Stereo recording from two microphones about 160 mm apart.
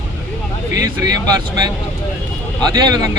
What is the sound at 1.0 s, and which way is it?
Speech, 25° right (ahead or behind).